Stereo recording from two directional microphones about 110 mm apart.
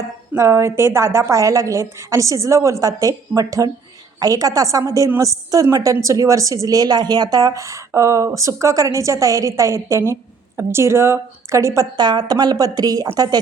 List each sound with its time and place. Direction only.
0.3 s a woman's voice: 25° right (ahead or behind)
11.9 s a woman's voice: 40° right (ahead or behind)